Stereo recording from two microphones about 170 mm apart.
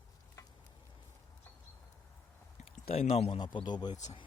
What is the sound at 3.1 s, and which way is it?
Speech, 30° left (ahead or behind).